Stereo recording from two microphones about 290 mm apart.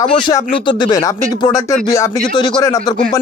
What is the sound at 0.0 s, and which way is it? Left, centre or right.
Speech, centre.